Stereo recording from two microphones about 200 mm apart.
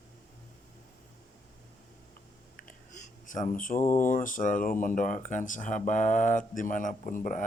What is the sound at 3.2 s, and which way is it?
Speech, 40° left (ahead or behind).